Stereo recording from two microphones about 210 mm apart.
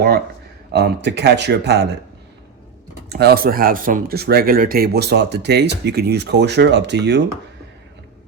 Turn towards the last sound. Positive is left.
turn(degrees=-55)  # may be behind; listen again after turning